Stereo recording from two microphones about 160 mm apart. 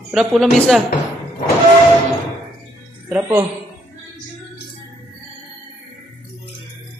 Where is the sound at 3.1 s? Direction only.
15° right (ahead or behind).